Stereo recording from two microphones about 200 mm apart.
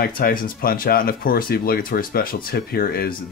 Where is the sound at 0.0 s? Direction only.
45° left (ahead or behind).